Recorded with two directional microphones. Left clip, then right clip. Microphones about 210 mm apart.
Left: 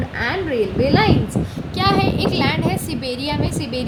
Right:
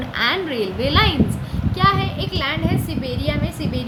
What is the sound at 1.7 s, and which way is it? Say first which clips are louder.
A woman's voice: left 1 dB; 40° left (ahead or behind).